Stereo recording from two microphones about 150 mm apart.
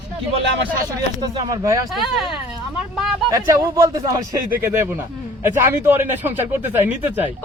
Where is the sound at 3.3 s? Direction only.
20° right (ahead or behind).